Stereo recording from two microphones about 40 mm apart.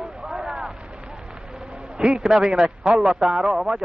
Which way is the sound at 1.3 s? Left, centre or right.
Centre.